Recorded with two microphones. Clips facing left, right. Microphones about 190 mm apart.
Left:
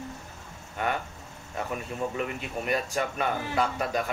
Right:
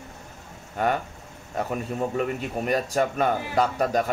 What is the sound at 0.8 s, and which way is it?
A man's voice, 40° right (ahead or behind).